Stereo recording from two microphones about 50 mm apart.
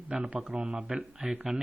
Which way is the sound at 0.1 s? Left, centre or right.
Right.